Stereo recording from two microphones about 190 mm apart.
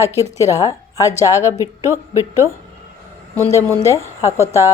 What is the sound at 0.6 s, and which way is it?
Speech, 20° left (ahead or behind).